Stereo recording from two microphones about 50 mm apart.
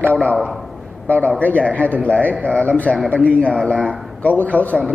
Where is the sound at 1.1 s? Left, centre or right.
Left.